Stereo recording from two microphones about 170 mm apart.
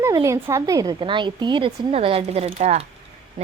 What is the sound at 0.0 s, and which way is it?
A woman's voice, 20° right (ahead or behind).